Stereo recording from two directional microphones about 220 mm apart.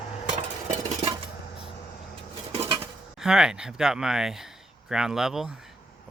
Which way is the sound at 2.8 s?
5° right (ahead or behind).